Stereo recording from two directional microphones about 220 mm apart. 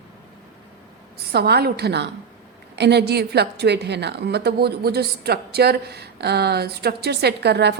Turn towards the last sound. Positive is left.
turn(degrees=-50)  # may be behind; listen again after turning